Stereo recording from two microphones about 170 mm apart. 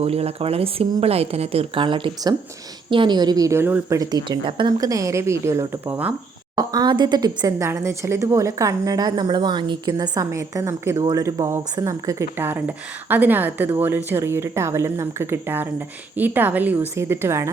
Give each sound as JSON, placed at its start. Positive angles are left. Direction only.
{"t": 0.0, "sound": "a woman's voice", "side_deg": -35}
{"t": 6.6, "sound": "speech", "side_deg": -20}